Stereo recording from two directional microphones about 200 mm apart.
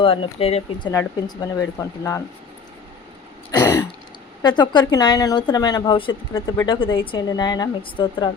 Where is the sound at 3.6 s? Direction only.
10° left (ahead or behind).